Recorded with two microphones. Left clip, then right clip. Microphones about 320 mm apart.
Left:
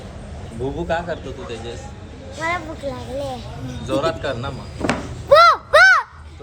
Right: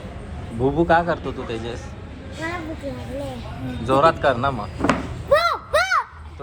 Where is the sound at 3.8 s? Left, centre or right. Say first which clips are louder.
Right 5 dB; centre.